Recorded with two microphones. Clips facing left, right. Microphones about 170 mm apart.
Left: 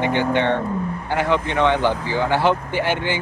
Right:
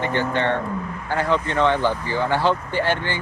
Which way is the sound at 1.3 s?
15° left (ahead or behind).